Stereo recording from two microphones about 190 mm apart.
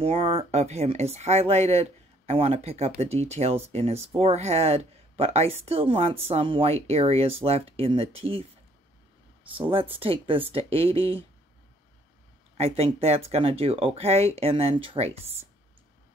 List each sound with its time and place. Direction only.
0.0 s speech: 30° right (ahead or behind)
9.6 s speech: 30° right (ahead or behind)
12.5 s speech: 35° right (ahead or behind)